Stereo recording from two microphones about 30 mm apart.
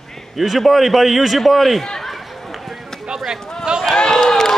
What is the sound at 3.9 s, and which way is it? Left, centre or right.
Crowd, left.